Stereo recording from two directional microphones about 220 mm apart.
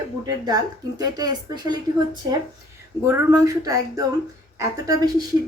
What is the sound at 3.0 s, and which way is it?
A woman's voice, 10° right (ahead or behind).